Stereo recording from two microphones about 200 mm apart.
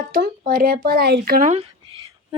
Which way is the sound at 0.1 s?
45° right (ahead or behind).